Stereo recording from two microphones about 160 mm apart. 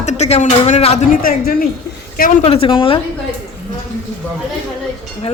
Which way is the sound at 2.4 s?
35° left (ahead or behind).